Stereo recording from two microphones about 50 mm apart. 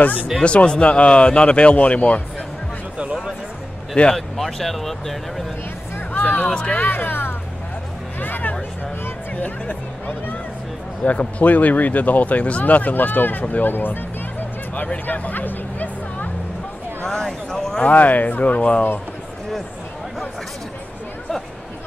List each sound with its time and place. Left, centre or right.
0.4 s speech: left
4.1 s speech: centre
6.1 s speech: left
6.5 s speech: left
6.8 s speech: left
14.8 s speech: left
17.0 s speech: centre
17.8 s speech: left